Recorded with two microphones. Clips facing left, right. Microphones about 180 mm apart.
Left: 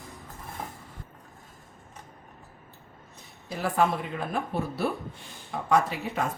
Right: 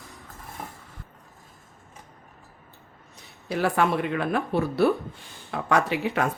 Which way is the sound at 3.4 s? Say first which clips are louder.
Right 2 dB; 70° right (ahead or behind).